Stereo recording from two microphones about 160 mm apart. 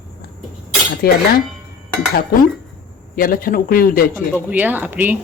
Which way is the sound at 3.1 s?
65° left (ahead or behind).